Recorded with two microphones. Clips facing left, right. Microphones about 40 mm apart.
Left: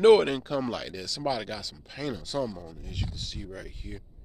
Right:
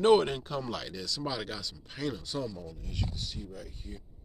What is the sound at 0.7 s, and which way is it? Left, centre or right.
Speech, left.